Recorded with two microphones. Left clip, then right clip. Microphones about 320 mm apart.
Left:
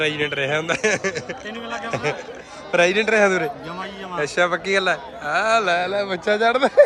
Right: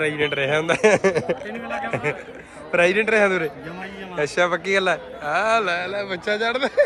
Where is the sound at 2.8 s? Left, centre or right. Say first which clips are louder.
Left 1 dB; centre.